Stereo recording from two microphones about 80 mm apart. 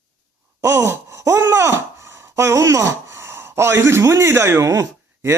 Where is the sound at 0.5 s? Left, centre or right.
Right.